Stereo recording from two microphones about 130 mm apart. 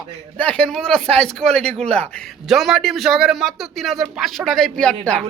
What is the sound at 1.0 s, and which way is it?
Speech, 50° right (ahead or behind).